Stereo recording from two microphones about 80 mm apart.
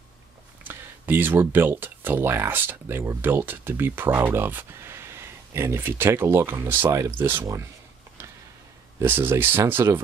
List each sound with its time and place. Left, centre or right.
0.7 s speech: right
9.0 s speech: right